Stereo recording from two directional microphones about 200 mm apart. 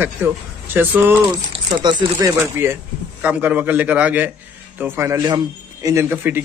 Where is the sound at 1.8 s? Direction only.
20° right (ahead or behind).